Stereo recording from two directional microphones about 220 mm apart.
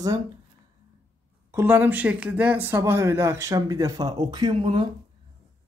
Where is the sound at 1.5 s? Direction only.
10° right (ahead or behind).